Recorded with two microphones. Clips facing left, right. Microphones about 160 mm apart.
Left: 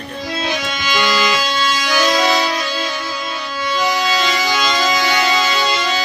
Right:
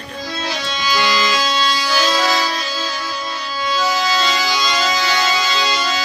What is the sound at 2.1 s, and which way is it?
Music, 15° left (ahead or behind).